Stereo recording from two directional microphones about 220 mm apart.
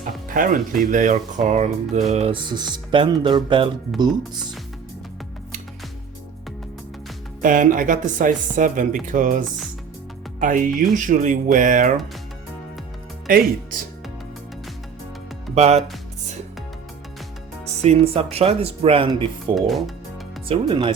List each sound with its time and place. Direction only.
0.3 s speech: 35° right (ahead or behind); by 3.7 s 20° right (ahead or behind)
7.4 s speech: 35° right (ahead or behind)
10.4 s speech: 35° right (ahead or behind)
15.5 s speech: 30° right (ahead or behind)
17.8 s speech: 25° right (ahead or behind)
19.5 s speech: centre (ahead or behind)
20.5 s speech: 25° right (ahead or behind)